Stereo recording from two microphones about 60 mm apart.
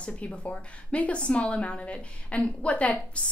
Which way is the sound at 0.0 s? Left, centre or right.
Centre.